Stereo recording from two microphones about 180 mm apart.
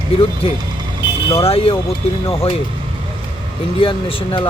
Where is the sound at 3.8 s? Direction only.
30° left (ahead or behind).